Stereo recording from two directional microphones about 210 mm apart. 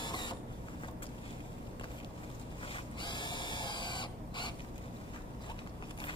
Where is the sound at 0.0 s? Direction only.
20° left (ahead or behind).